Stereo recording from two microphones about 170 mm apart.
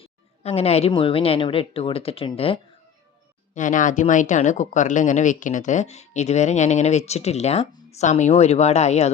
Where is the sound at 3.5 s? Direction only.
50° left (ahead or behind).